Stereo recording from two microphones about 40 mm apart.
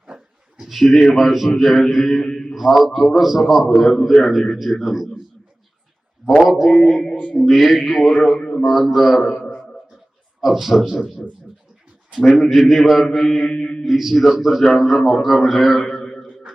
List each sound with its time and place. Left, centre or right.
0.1 s a sound: centre
0.6 s a man's voice: centre
6.5 s a man's voice: centre
8.4 s a man's voice: centre
8.6 s a man's voice: centre
10.4 s a man's voice: centre
12.1 s a man's voice: centre
13.6 s mantra: centre
13.8 s a man's voice: centre